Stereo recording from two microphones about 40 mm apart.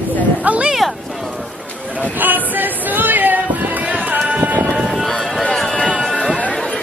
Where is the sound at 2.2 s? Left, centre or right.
Right.